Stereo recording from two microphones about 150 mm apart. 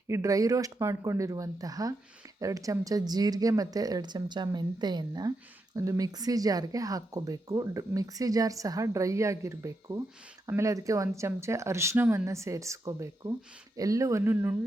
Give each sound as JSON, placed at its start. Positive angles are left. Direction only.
{"t": 0.1, "sound": "speech", "side_deg": -20}